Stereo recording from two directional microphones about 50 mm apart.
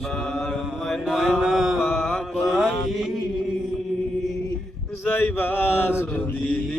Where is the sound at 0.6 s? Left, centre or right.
Centre.